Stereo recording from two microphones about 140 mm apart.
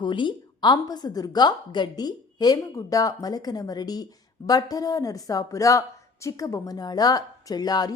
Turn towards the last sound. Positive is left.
turn(degrees=30)  # may be behind; listen again after turning